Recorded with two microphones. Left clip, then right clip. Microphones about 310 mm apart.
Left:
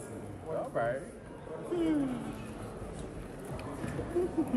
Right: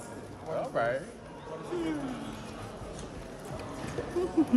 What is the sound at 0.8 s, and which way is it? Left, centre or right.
Bird, right.